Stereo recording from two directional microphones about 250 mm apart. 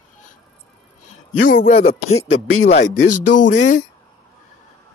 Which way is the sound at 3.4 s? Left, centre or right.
Left.